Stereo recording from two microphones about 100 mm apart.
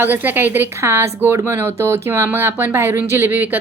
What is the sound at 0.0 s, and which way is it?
Speech, 20° right (ahead or behind).